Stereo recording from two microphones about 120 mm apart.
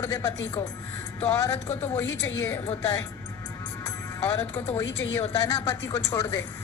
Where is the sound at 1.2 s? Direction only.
30° left (ahead or behind).